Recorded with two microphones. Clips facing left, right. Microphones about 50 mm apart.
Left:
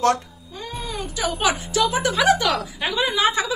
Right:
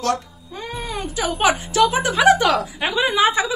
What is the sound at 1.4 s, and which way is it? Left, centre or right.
Speech, right.